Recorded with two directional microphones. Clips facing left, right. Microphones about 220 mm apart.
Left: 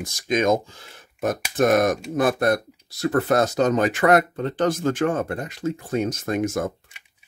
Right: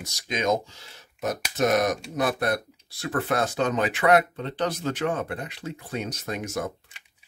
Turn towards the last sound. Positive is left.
turn(degrees=50)  # may be behind; listen again after turning